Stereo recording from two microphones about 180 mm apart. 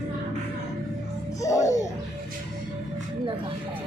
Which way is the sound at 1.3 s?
20° left (ahead or behind).